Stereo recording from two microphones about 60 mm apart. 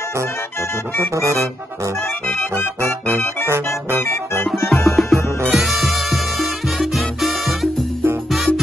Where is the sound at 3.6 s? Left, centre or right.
Left.